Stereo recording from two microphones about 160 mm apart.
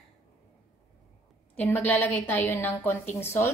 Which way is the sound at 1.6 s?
10° left (ahead or behind).